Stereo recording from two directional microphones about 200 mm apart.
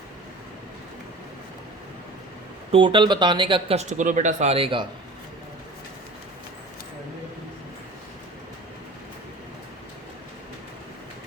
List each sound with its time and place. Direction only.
2.7 s speech: 25° right (ahead or behind)